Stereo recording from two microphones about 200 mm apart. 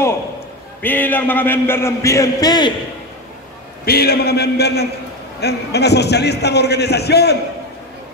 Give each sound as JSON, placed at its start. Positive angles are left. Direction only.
{"t": 0.8, "sound": "a man's voice", "side_deg": 10}
{"t": 3.8, "sound": "a man's voice", "side_deg": 50}